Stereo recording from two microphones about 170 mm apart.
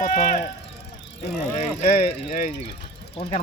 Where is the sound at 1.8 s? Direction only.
60° left (ahead or behind).